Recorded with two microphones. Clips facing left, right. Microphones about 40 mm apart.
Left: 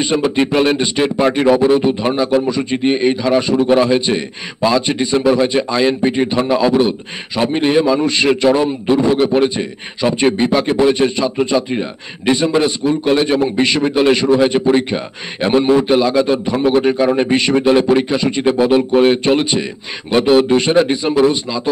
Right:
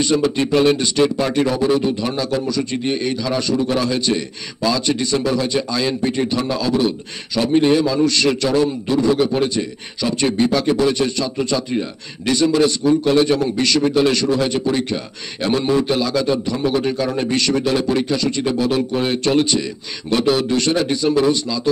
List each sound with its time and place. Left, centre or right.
0.0 s speech: left